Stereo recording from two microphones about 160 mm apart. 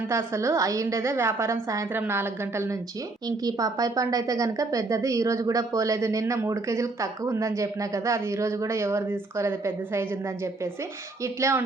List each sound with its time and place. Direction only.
0.1 s a woman's voice: 15° right (ahead or behind)